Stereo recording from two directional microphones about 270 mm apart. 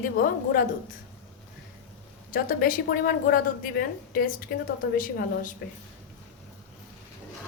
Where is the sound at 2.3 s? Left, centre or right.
Left.